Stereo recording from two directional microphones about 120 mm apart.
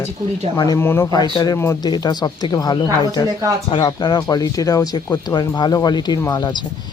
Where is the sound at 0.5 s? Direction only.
30° left (ahead or behind).